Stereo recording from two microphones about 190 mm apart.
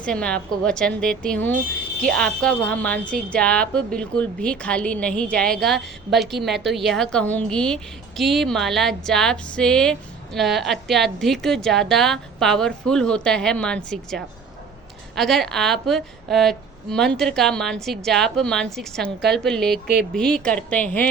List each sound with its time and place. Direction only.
0.0 s a woman's voice: 5° left (ahead or behind)